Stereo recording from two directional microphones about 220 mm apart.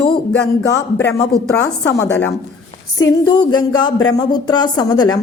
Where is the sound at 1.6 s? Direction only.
10° left (ahead or behind).